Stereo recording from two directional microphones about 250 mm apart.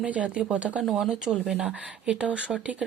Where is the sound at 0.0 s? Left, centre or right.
Centre.